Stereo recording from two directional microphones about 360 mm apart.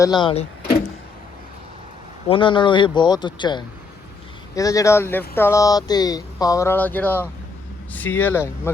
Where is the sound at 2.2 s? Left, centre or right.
Centre.